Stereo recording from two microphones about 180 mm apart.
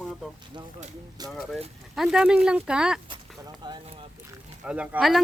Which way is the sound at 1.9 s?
5° right (ahead or behind).